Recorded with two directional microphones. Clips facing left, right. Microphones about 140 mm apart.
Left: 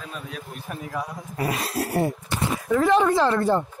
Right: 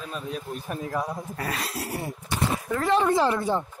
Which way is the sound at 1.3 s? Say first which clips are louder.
Left 8 dB; 15° left (ahead or behind).